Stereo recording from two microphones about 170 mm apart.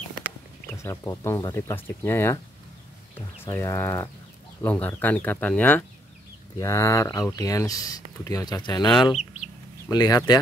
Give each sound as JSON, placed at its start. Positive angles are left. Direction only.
{"t": 0.8, "sound": "speech", "side_deg": 15}
{"t": 3.4, "sound": "speech", "side_deg": 15}